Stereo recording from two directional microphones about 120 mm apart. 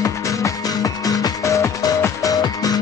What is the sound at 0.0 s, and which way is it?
Music, 25° left (ahead or behind).